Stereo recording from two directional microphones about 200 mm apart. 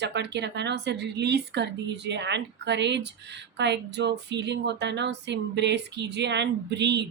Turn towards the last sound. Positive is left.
turn(degrees=-60)  # may be behind; listen again after turning